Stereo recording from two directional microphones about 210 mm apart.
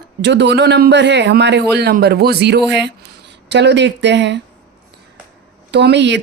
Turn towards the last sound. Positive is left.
turn(degrees=-55)  # may be behind; listen again after turning